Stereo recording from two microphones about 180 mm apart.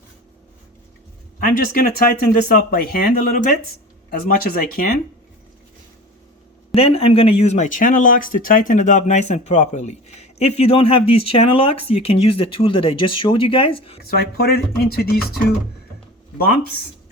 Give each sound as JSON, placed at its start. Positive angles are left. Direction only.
{"t": 1.4, "sound": "speech", "side_deg": 50}
{"t": 6.7, "sound": "speech", "side_deg": 35}
{"t": 14.0, "sound": "speech", "side_deg": 60}